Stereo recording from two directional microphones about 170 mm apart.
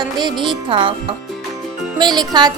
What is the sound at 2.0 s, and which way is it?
Speech, 25° right (ahead or behind).